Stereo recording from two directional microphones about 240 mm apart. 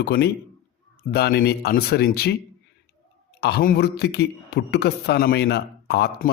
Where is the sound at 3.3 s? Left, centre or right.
Left.